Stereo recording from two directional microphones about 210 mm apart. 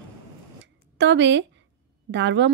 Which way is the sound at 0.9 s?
60° right (ahead or behind).